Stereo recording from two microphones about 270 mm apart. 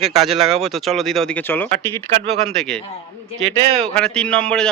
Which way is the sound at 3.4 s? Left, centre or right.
Right.